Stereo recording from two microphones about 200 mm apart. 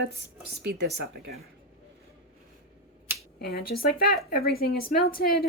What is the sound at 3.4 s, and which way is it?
A woman's voice, 50° left (ahead or behind).